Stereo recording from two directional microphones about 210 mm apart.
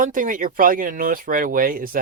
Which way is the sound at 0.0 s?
40° right (ahead or behind).